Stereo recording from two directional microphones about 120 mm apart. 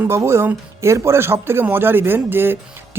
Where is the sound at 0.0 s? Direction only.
25° right (ahead or behind).